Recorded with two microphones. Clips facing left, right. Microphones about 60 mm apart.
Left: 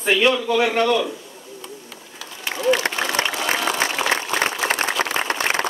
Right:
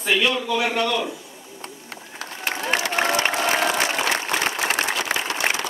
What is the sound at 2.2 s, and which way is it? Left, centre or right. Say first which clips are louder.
Run: right 1 dB; right.